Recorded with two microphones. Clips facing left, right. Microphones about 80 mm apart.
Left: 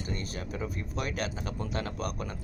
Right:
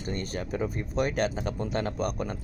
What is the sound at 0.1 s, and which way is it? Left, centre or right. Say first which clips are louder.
Speech: right 8 dB; right.